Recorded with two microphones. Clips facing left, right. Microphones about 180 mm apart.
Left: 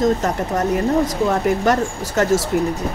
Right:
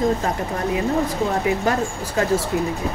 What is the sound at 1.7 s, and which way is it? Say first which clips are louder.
Speech: left 3 dB; 75° left (ahead or behind).